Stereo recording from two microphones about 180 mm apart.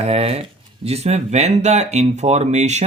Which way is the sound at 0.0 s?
35° right (ahead or behind).